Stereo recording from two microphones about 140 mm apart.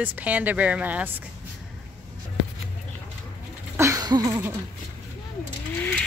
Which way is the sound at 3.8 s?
25° right (ahead or behind).